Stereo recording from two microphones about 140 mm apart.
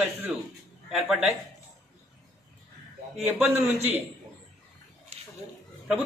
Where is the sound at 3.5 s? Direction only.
50° right (ahead or behind).